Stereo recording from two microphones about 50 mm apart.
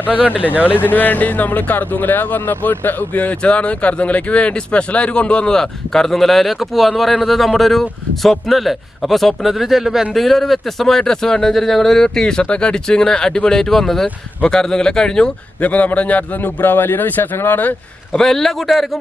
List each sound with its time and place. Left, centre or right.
0.1 s speech: right
0.7 s speech: left; by 15.3 s centre
15.6 s a man's voice: left
16.7 s a man's voice: left
18.1 s speech: centre